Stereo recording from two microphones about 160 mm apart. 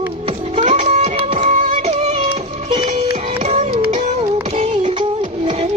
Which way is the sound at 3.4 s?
45° right (ahead or behind).